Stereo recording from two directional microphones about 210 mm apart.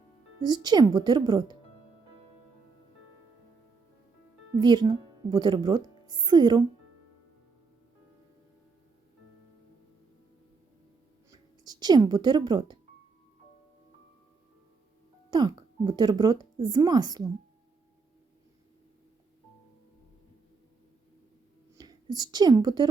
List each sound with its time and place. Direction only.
0.4 s a woman's voice: 20° right (ahead or behind)
4.6 s a woman's voice: 20° right (ahead or behind)
11.3 s a sound: 20° right (ahead or behind)
15.3 s a woman's voice: 20° right (ahead or behind)
21.8 s a woman's voice: 20° right (ahead or behind)